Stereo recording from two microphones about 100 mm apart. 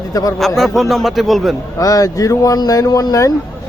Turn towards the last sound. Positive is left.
turn(degrees=35)  # may be behind; listen again after turning